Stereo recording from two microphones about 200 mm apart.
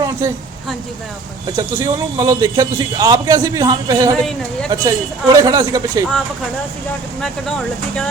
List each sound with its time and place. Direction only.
0.0 s vehicle: 15° right (ahead or behind)
1.5 s a man's voice: 15° right (ahead or behind)
7.2 s speech: 5° left (ahead or behind)